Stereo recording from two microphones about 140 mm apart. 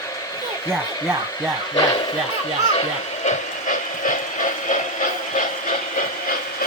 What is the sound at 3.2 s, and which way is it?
Train, 65° left (ahead or behind).